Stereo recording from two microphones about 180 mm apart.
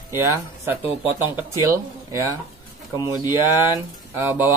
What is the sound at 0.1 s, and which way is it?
Speech, 15° right (ahead or behind).